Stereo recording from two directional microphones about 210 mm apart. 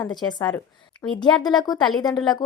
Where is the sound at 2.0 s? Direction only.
20° left (ahead or behind).